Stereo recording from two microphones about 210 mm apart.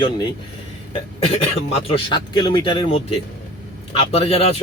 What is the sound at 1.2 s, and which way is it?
Speech, 30° left (ahead or behind).